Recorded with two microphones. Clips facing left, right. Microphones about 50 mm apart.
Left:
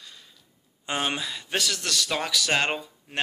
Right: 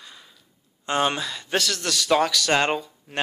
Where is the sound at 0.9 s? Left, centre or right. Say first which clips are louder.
Right 5 dB; centre.